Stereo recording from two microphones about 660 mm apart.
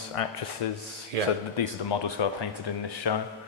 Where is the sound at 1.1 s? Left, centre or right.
Right.